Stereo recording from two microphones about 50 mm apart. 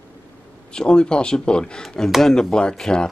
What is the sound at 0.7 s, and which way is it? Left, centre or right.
Speech, centre.